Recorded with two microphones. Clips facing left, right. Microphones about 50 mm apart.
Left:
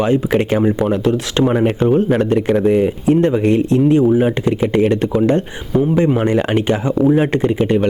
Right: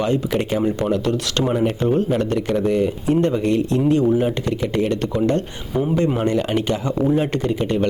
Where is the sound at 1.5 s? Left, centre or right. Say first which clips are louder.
Left 3 dB; left.